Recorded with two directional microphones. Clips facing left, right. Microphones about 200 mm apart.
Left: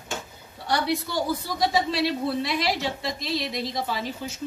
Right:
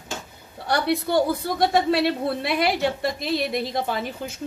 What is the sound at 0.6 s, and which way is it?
Speech, 60° right (ahead or behind).